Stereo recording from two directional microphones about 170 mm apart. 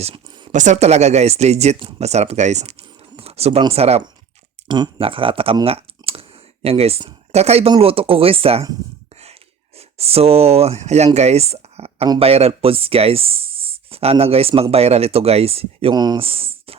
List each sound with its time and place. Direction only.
0.0 s a sound: 30° right (ahead or behind)
0.5 s speech: 45° right (ahead or behind)
5.6 s computer keyboard: 35° right (ahead or behind)
7.7 s speech: 35° right (ahead or behind)